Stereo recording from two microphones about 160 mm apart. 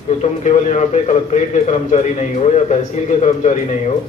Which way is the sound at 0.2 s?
45° left (ahead or behind).